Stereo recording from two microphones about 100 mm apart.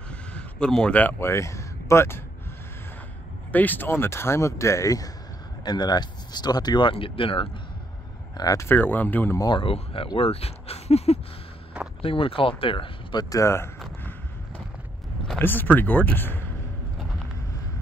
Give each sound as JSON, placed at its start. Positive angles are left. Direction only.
{"t": 0.1, "sound": "a sound", "side_deg": 10}
{"t": 1.2, "sound": "speech", "side_deg": 30}
{"t": 3.5, "sound": "speech", "side_deg": 20}
{"t": 8.4, "sound": "speech", "side_deg": 40}
{"t": 8.6, "sound": "speech", "side_deg": 20}
{"t": 9.4, "sound": "speech", "side_deg": 55}
{"t": 10.1, "sound": "speech", "side_deg": 80}
{"t": 12.0, "sound": "speech", "side_deg": 65}
{"t": 15.3, "sound": "speech", "side_deg": 20}